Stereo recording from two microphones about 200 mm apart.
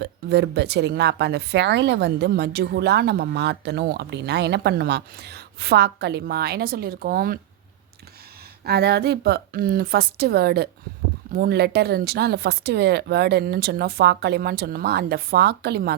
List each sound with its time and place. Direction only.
0.0 s a woman's voice: 55° right (ahead or behind)
8.6 s speech: 55° right (ahead or behind)